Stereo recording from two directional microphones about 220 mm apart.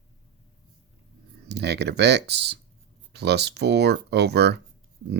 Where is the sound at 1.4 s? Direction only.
50° right (ahead or behind).